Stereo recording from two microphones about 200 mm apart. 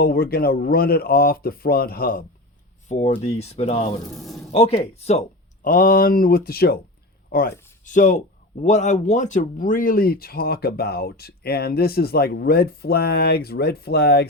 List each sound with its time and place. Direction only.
0.0 s speech: 50° left (ahead or behind)
2.9 s speech: 35° left (ahead or behind)
4.1 s speech: centre (ahead or behind)
4.5 s speech: 30° left (ahead or behind)
5.6 s speech: 40° left (ahead or behind)